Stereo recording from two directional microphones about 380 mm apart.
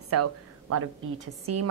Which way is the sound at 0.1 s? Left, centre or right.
Right.